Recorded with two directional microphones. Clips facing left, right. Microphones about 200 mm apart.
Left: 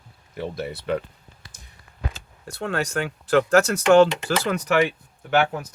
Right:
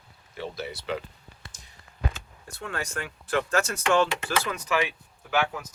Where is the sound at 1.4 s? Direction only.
25° right (ahead or behind).